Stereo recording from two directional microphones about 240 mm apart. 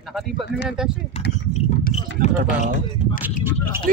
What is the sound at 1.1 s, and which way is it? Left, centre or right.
Speech, left.